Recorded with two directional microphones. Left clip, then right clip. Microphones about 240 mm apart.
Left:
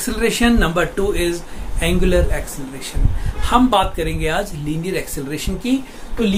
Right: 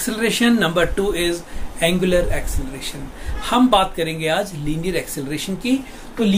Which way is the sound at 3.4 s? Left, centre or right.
Centre.